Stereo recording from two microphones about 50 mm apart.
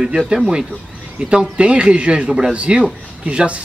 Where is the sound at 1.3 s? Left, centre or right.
Centre.